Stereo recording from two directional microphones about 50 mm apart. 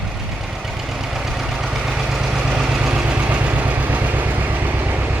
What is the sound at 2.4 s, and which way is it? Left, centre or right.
Vehicle, centre.